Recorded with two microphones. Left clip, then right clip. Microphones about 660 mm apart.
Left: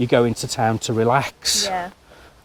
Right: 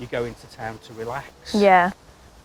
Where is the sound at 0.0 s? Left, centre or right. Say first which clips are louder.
Left 10 dB; left.